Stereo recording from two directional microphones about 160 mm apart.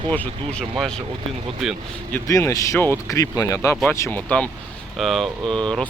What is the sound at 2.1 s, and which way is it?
Speech, 20° left (ahead or behind).